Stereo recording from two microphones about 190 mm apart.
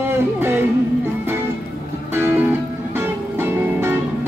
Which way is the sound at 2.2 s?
10° right (ahead or behind).